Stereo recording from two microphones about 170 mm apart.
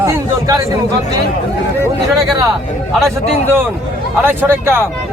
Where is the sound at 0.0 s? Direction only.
20° right (ahead or behind).